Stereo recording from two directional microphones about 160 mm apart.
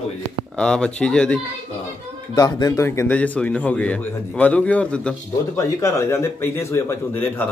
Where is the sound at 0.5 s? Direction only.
5° left (ahead or behind).